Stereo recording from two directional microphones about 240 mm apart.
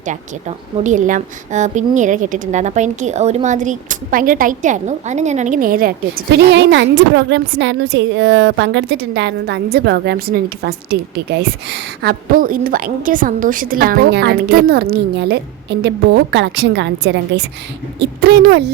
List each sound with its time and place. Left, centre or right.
0.0 s a woman's voice: right